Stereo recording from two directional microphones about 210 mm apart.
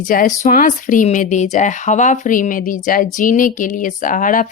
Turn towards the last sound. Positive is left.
turn(degrees=40)  # may be behind; listen again after turning